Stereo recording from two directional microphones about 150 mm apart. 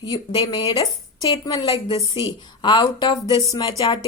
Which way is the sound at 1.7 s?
40° left (ahead or behind).